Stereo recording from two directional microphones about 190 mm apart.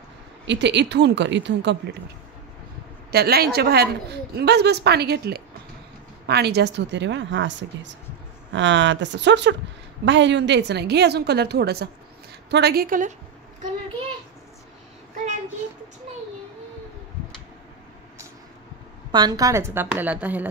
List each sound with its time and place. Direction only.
0.5 s speech: 65° right (ahead or behind)
3.1 s a woman's voice: 55° right (ahead or behind)
19.1 s a woman's voice: 20° right (ahead or behind)